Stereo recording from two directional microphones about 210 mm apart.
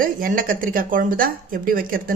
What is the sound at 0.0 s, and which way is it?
Speech, 40° right (ahead or behind).